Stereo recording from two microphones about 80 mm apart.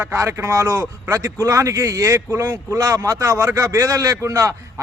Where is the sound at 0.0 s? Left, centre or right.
Right.